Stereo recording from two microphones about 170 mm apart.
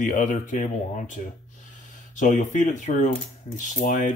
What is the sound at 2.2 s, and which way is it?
Speech, 45° left (ahead or behind).